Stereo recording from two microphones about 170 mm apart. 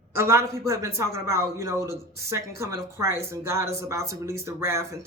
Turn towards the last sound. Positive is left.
turn(degrees=-15)  # may be behind; listen again after turning